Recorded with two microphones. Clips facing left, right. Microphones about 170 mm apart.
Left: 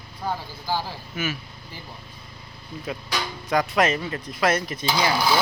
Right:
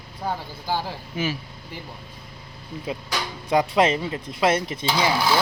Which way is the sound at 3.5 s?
30° right (ahead or behind).